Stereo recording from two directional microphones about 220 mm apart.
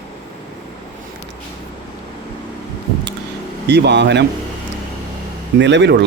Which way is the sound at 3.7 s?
50° right (ahead or behind).